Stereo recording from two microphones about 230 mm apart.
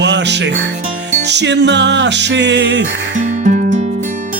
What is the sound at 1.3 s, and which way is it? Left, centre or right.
Speech, right.